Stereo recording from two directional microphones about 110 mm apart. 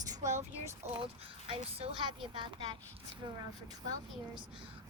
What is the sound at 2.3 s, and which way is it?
Speech, 50° right (ahead or behind).